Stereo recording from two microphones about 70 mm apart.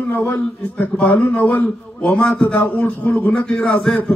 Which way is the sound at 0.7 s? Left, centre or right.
Left.